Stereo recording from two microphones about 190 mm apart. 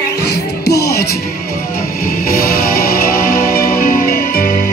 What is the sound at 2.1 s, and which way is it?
Music, 50° left (ahead or behind).